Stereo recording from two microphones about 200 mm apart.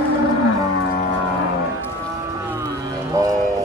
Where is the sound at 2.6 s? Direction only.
15° right (ahead or behind).